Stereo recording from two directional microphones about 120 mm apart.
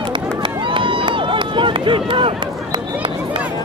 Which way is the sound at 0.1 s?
40° right (ahead or behind).